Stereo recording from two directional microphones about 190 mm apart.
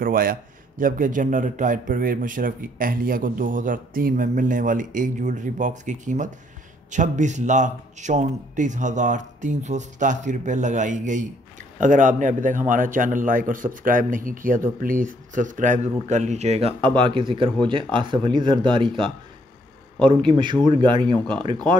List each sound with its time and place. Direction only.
0.0 s a man's voice: 50° right (ahead or behind); by 21.5 s 25° right (ahead or behind)